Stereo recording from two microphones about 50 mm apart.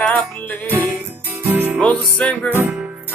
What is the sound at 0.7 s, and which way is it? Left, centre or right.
Music, right.